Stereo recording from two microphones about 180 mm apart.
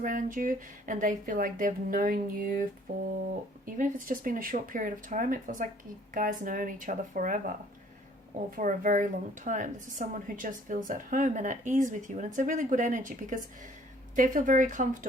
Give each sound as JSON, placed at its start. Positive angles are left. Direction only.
{"t": 0.0, "sound": "a woman's voice", "side_deg": -45}